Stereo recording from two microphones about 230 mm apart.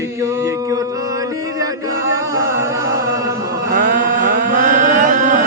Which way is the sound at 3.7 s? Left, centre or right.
Right.